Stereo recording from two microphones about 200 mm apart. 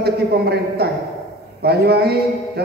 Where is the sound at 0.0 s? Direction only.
55° right (ahead or behind).